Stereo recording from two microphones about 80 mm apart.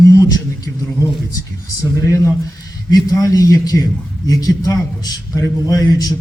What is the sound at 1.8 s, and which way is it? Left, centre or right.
A man's voice, left.